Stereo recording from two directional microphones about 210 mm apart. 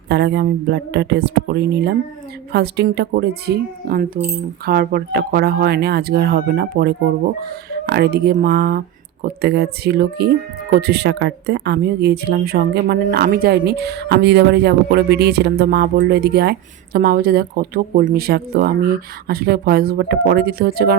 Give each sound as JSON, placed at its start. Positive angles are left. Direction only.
{"t": 0.1, "sound": "speech", "side_deg": -55}